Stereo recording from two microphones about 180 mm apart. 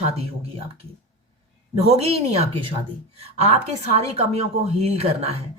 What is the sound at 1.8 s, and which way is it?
Speech, 35° right (ahead or behind).